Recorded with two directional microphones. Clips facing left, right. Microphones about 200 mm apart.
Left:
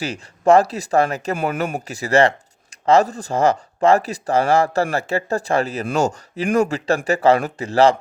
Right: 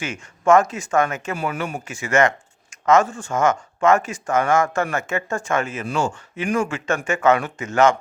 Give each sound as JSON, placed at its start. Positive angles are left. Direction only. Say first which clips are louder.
{"t": 0.0, "sound": "speech", "louder": "left 3 dB", "side_deg": 35}